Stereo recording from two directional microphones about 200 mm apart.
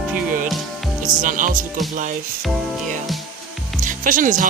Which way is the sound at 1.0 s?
40° right (ahead or behind).